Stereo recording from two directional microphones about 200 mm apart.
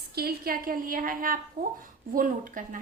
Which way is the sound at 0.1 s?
50° right (ahead or behind).